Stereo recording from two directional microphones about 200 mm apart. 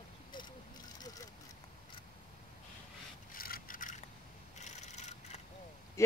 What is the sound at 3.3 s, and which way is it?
Vehicle, 45° left (ahead or behind).